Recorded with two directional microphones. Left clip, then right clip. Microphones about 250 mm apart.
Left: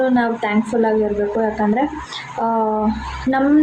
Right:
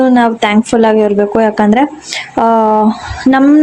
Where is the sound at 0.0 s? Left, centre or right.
Right.